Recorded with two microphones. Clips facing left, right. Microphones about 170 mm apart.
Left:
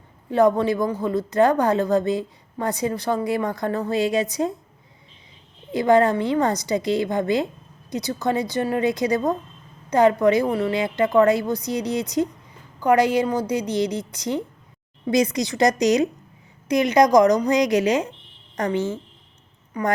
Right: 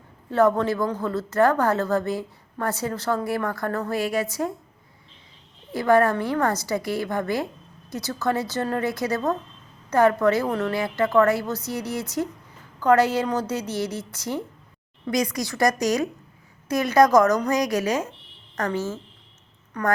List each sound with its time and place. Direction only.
0.3 s a woman's voice: 15° left (ahead or behind)
5.7 s a woman's voice: 20° left (ahead or behind)